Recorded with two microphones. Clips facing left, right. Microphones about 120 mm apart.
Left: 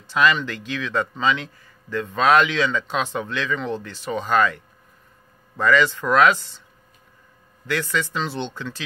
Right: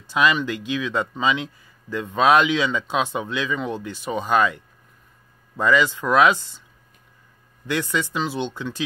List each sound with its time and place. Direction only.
0.1 s speech: 15° right (ahead or behind)
7.6 s speech: 20° right (ahead or behind)